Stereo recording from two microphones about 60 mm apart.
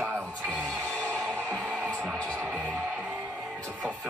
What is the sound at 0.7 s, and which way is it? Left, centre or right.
Music, left.